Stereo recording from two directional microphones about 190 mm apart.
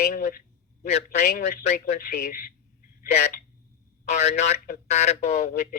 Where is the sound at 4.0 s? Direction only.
35° left (ahead or behind).